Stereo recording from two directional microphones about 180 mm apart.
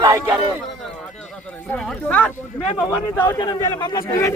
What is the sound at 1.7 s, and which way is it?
Speech, 10° left (ahead or behind).